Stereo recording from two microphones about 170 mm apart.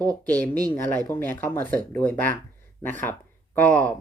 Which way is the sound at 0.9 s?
10° left (ahead or behind).